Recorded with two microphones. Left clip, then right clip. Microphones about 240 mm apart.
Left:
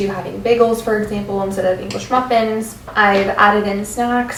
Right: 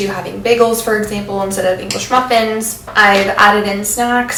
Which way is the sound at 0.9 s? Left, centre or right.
Centre.